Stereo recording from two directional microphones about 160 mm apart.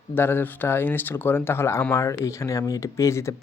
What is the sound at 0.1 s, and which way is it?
Speech, 15° left (ahead or behind).